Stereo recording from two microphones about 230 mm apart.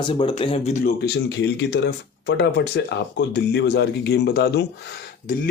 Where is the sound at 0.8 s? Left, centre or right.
Left.